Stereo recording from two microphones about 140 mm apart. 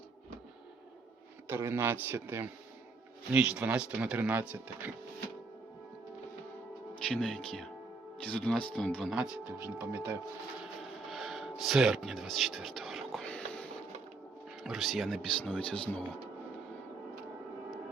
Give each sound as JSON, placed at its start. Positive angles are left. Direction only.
{"t": 1.5, "sound": "speech", "side_deg": -20}
{"t": 7.0, "sound": "speech", "side_deg": 5}
{"t": 11.1, "sound": "a sound", "side_deg": 0}
{"t": 14.6, "sound": "speech", "side_deg": 0}